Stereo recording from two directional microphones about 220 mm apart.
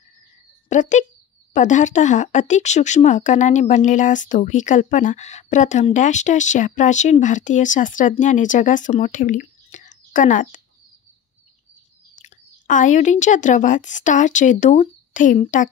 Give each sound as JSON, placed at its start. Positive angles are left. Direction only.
{"t": 0.7, "sound": "speech", "side_deg": 35}
{"t": 12.2, "sound": "speech", "side_deg": 35}